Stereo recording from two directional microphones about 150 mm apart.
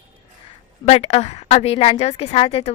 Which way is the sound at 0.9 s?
45° left (ahead or behind).